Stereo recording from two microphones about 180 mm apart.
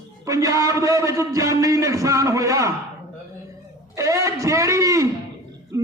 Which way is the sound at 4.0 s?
20° right (ahead or behind).